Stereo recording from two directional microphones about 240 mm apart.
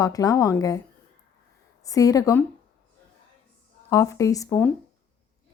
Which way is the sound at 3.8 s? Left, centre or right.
Centre.